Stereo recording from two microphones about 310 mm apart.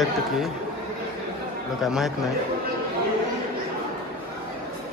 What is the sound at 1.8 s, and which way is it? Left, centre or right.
Speech, centre.